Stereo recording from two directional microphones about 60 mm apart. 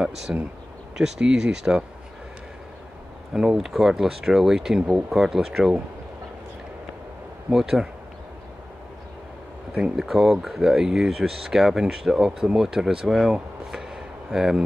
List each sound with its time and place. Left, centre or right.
0.3 s speech: centre
3.3 s speech: centre
7.5 s speech: centre
9.8 s speech: centre